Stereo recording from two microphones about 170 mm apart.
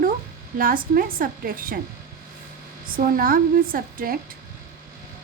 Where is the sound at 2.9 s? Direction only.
55° right (ahead or behind).